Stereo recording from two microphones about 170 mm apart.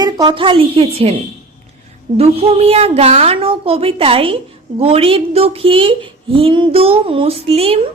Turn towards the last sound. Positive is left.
turn(degrees=-35)  # may be behind; listen again after turning